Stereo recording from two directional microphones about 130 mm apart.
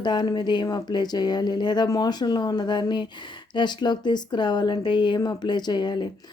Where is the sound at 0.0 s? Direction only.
35° left (ahead or behind).